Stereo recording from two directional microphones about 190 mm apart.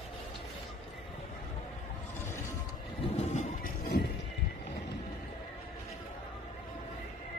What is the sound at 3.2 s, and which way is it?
Music, 40° left (ahead or behind).